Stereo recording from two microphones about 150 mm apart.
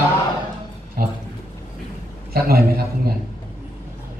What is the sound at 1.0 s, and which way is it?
Speech, 75° right (ahead or behind).